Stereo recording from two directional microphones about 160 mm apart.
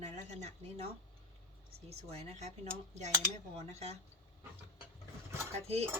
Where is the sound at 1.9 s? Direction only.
40° right (ahead or behind).